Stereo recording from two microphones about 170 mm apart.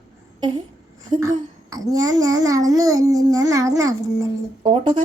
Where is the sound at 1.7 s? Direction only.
20° right (ahead or behind).